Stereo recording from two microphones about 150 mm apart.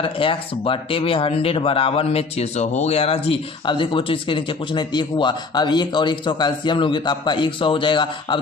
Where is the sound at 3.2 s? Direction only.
35° left (ahead or behind).